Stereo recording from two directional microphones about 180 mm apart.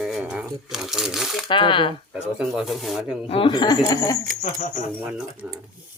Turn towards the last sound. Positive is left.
turn(degrees=-10)  # may be behind; listen again after turning